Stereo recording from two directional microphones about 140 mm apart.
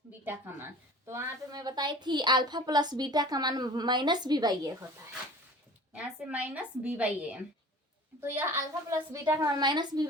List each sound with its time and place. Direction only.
0.3 s a woman's voice: 15° right (ahead or behind)
5.9 s a woman's voice: 10° right (ahead or behind); by 10.1 s 30° right (ahead or behind)